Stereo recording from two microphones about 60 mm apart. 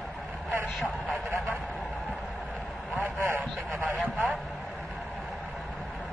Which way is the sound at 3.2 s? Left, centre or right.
Right.